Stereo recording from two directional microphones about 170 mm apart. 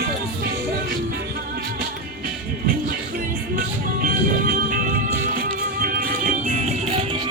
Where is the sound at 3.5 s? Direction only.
55° right (ahead or behind).